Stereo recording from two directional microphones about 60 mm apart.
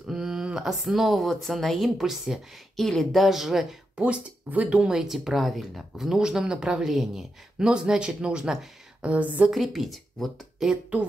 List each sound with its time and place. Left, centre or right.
0.0 s speech: centre
2.7 s speech: centre
3.9 s a woman's voice: right
9.5 s speech: centre